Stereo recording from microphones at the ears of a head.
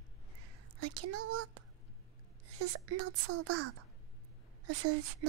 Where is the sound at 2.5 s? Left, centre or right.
Right.